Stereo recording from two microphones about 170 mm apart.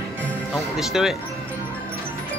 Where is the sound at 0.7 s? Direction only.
Centre (ahead or behind).